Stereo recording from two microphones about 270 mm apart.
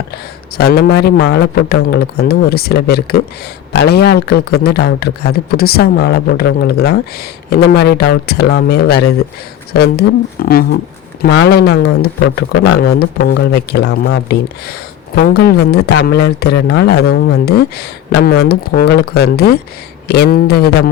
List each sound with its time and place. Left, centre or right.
0.1 s speech: left